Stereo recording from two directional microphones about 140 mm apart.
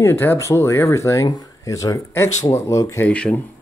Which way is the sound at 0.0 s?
15° left (ahead or behind).